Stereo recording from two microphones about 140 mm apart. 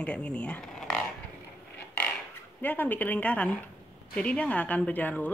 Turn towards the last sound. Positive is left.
turn(degrees=10)  # may be behind; listen again after turning